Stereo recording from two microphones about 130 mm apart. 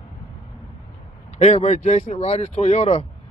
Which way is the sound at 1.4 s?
55° left (ahead or behind).